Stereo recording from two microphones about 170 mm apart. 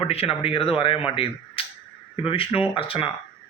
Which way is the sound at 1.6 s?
30° left (ahead or behind).